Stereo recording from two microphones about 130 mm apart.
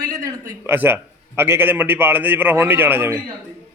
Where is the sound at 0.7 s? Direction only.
15° right (ahead or behind).